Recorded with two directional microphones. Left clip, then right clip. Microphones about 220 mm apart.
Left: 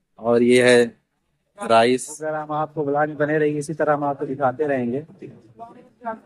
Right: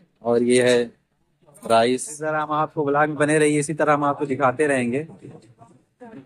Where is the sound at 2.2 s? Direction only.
10° right (ahead or behind).